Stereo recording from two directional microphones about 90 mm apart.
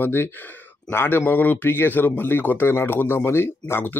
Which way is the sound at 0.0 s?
25° left (ahead or behind).